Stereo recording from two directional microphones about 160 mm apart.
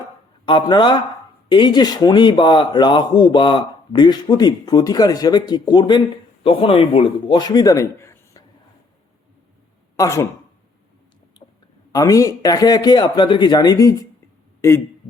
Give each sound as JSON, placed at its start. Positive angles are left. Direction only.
{"t": 0.4, "sound": "speech", "side_deg": 30}
{"t": 10.0, "sound": "speech", "side_deg": 20}
{"t": 11.4, "sound": "a sound", "side_deg": 30}
{"t": 11.9, "sound": "speech", "side_deg": 20}